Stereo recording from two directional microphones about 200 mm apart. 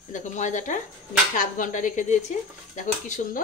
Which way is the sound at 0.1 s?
40° left (ahead or behind).